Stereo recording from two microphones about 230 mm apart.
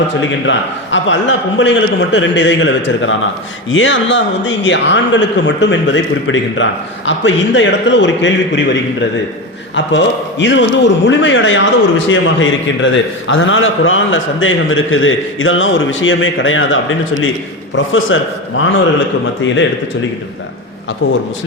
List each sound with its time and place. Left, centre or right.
0.2 s a man's voice: left